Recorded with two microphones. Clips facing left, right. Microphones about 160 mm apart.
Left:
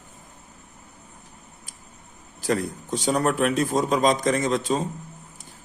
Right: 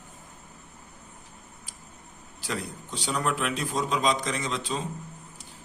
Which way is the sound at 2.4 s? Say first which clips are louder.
Left 9 dB; 45° left (ahead or behind).